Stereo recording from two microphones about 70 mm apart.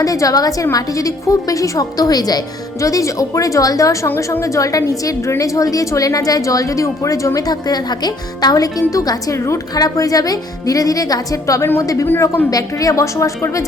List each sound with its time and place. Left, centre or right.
0.0 s speech: left
2.8 s a woman's voice: left
4.2 s a woman's voice: left
9.7 s a woman's voice: left